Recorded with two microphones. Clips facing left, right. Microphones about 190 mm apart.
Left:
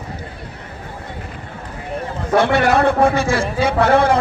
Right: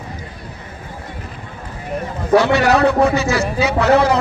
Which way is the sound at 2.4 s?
50° left (ahead or behind).